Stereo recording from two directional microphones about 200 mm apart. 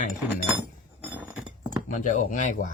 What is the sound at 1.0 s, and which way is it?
Chink, 5° right (ahead or behind).